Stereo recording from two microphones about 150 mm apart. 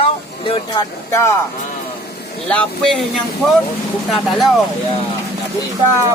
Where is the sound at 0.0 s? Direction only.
35° left (ahead or behind).